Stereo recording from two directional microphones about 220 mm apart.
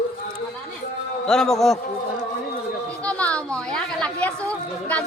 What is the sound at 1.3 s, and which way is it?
Speech, centre (ahead or behind).